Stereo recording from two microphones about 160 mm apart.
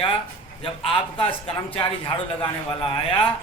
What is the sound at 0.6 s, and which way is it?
A man's voice, 35° left (ahead or behind).